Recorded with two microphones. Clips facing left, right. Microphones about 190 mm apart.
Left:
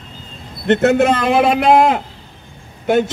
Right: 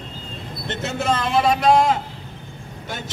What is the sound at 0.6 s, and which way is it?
A man's voice, 65° left (ahead or behind).